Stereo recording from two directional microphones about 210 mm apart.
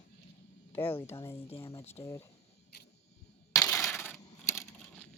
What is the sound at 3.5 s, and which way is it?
Coin, 15° left (ahead or behind).